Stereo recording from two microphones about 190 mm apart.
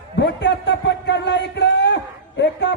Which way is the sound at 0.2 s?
65° left (ahead or behind).